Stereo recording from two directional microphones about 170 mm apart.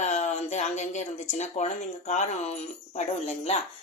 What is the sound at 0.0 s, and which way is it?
Speech, 45° left (ahead or behind).